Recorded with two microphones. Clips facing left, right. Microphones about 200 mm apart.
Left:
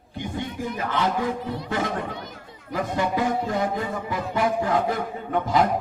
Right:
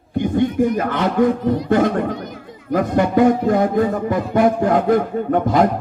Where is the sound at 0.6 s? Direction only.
50° right (ahead or behind).